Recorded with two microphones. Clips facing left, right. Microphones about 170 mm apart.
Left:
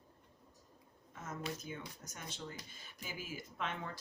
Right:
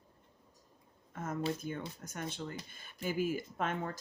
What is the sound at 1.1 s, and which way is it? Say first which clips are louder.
Speech: right 7 dB; 55° right (ahead or behind).